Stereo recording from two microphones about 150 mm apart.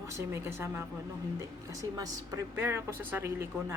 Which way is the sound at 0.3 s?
15° right (ahead or behind).